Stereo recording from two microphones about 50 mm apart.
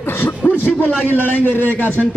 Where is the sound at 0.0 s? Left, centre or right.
Left.